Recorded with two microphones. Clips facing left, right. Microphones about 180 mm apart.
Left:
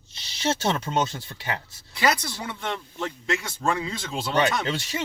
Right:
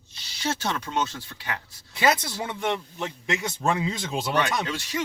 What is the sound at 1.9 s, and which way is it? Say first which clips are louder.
Speech: right 1 dB; 20° right (ahead or behind).